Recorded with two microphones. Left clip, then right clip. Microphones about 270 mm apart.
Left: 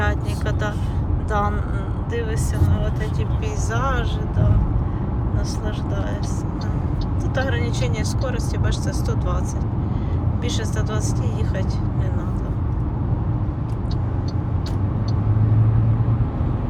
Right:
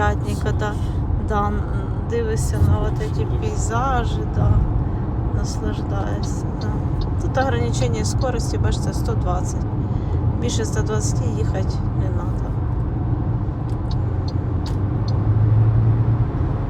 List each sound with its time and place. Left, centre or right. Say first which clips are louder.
0.0 s vehicle: right 3 dB; centre
1.3 s speech: even; centre
3.7 s speech: right 3 dB; centre
7.3 s speech: right 4 dB; right
10.4 s speech: right 3 dB; right